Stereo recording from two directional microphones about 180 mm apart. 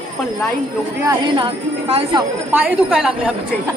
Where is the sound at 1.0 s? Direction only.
15° right (ahead or behind).